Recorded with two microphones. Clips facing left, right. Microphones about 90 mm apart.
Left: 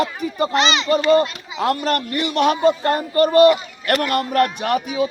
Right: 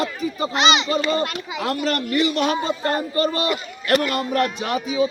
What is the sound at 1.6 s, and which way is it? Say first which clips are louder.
A man's voice: left 3 dB; 50° left (ahead or behind).